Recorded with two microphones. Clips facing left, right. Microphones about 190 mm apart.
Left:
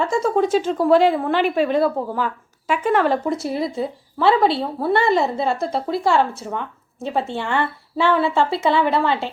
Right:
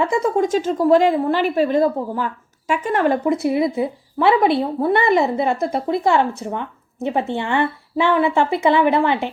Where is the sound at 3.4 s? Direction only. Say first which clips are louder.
Right 5 dB; 55° right (ahead or behind).